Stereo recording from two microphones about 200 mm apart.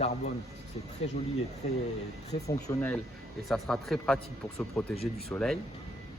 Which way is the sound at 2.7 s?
10° left (ahead or behind).